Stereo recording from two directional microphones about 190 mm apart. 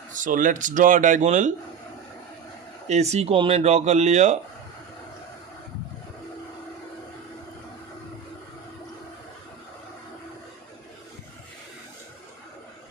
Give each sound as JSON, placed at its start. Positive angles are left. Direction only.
{"t": 0.1, "sound": "speech", "side_deg": -45}
{"t": 2.8, "sound": "speech", "side_deg": -35}